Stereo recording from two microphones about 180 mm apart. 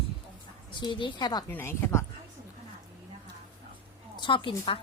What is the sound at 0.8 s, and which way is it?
Speech, 25° left (ahead or behind).